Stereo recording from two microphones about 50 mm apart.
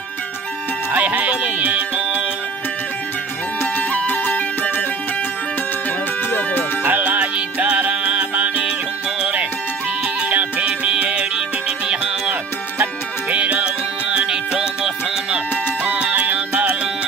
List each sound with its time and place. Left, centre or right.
0.9 s music: right
3.9 s music: left
6.8 s music: right
14.1 s music: centre
15.8 s music: right